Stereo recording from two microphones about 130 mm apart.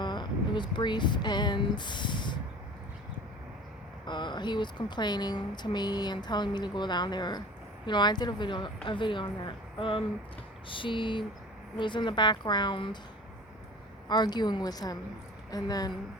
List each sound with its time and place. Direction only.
0.0 s speech: 35° left (ahead or behind)
4.0 s speech: 35° left (ahead or behind)
14.1 s a woman's voice: 35° left (ahead or behind)